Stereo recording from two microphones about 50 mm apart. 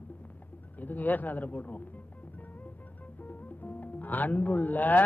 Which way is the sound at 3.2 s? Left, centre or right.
Left.